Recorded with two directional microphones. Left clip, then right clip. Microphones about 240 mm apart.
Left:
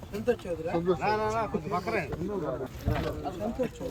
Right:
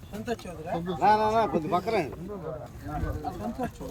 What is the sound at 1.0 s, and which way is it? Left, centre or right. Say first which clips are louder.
Speech: right 6 dB; right.